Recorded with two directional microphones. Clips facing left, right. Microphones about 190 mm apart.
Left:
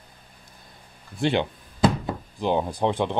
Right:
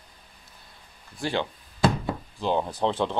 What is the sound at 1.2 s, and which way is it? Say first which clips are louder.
Speech: left 5 dB; 20° left (ahead or behind).